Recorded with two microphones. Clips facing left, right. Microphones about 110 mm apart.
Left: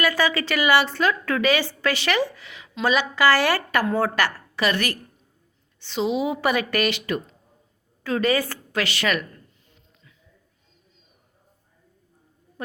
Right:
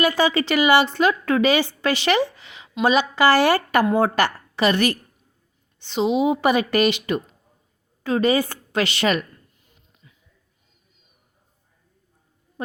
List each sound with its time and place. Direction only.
0.0 s a woman's voice: 20° right (ahead or behind)
12.6 s a woman's voice: 20° right (ahead or behind)